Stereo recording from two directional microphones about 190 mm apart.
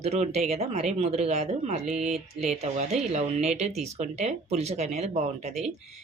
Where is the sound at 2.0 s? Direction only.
Centre (ahead or behind).